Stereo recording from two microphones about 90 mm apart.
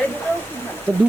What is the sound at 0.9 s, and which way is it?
Speech, 20° left (ahead or behind).